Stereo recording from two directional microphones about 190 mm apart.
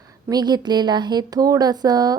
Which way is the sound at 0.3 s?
20° right (ahead or behind).